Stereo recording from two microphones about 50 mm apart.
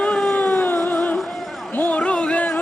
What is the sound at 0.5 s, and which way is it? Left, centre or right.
Music, left.